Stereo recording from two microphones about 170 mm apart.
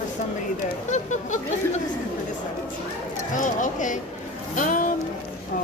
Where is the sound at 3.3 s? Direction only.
50° left (ahead or behind).